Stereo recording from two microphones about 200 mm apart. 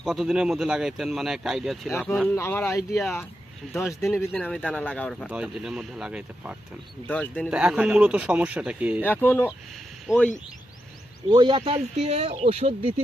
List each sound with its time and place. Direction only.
0.0 s speech: centre (ahead or behind)
1.9 s speech: 15° left (ahead or behind); by 6.6 s 5° right (ahead or behind)
7.1 s speech: 5° left (ahead or behind)
7.5 s speech: 5° right (ahead or behind)
9.0 s speech: 10° left (ahead or behind)
11.3 s speech: 25° right (ahead or behind)